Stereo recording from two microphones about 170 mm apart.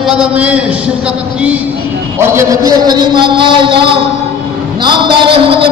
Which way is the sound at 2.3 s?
20° right (ahead or behind).